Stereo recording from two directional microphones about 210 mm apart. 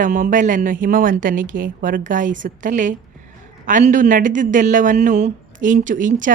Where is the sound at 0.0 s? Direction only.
40° right (ahead or behind).